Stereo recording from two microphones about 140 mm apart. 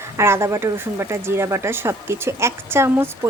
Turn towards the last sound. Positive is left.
turn(degrees=-20)  # may be behind; listen again after turning